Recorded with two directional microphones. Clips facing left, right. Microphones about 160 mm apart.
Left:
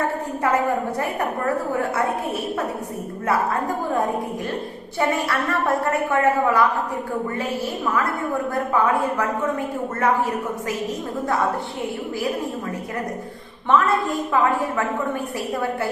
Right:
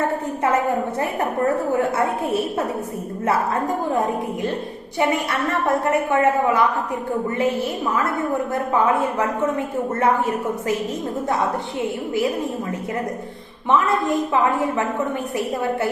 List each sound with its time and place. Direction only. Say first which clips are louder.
4.9 s a woman's voice: right 1 dB; 20° right (ahead or behind)
13.7 s a woman's voice: even; 20° right (ahead or behind)